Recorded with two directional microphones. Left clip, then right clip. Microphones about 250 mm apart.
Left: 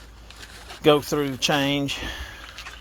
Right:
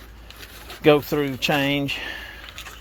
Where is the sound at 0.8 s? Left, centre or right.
Centre.